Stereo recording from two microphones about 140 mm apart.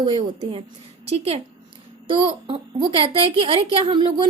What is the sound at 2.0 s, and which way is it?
A child's voice, 40° right (ahead or behind).